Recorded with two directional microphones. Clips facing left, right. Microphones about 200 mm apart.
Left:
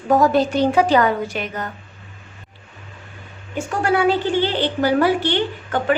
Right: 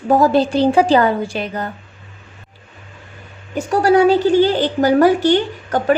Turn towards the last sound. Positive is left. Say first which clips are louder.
# right 4 dB
turn(degrees=-40)  # may be behind; listen again after turning